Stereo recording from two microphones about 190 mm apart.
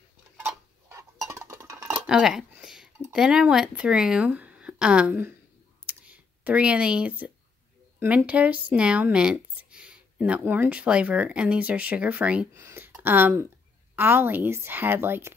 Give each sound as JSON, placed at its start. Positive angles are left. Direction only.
{"t": 0.4, "sound": "tick-tock", "side_deg": -10}
{"t": 1.2, "sound": "music", "side_deg": -15}
{"t": 2.0, "sound": "dishes", "side_deg": -5}
{"t": 3.0, "sound": "speech", "side_deg": -5}
{"t": 5.9, "sound": "computer keyboard", "side_deg": -5}
{"t": 8.0, "sound": "speech", "side_deg": -10}